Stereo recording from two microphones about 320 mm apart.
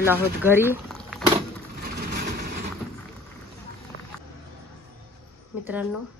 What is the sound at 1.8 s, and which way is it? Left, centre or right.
Vehicle, right.